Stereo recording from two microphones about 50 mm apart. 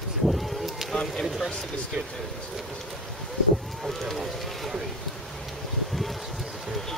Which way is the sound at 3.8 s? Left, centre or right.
Centre.